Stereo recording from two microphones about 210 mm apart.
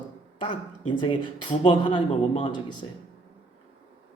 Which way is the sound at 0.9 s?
25° left (ahead or behind).